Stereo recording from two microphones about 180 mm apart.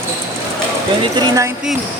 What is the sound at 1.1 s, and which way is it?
Speech, 20° right (ahead or behind).